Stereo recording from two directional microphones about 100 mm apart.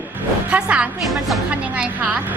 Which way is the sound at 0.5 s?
10° right (ahead or behind).